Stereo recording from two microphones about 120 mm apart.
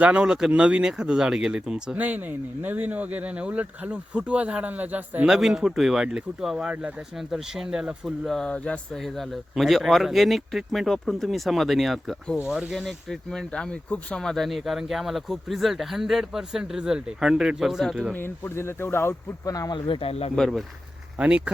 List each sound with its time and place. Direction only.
0.0 s speech: 10° right (ahead or behind)
18.1 s speech: 20° left (ahead or behind)
19.9 s speech: 50° left (ahead or behind)
20.3 s speech: centre (ahead or behind)
21.2 s speech: 10° right (ahead or behind)